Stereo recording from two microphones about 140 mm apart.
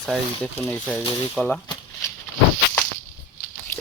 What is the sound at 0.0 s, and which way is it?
Speech, 5° left (ahead or behind).